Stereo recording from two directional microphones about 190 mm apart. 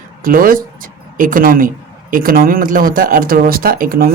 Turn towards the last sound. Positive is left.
turn(degrees=-50)  # may be behind; listen again after turning